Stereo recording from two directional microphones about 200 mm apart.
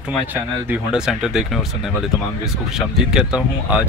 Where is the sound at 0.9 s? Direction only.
5° right (ahead or behind).